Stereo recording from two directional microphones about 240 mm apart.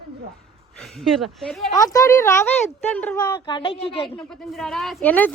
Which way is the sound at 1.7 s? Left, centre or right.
Centre.